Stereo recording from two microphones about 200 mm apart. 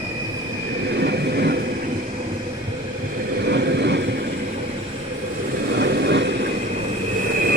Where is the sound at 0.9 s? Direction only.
55° right (ahead or behind).